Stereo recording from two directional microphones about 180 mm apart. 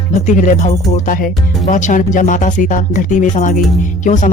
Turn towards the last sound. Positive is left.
turn(degrees=45)  # may be behind; listen again after turning